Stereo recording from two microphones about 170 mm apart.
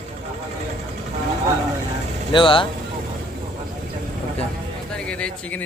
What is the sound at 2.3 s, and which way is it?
Speech, 30° left (ahead or behind).